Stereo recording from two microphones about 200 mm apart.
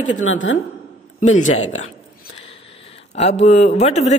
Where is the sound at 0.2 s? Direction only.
75° left (ahead or behind).